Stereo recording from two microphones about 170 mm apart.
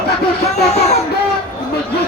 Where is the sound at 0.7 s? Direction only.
40° left (ahead or behind).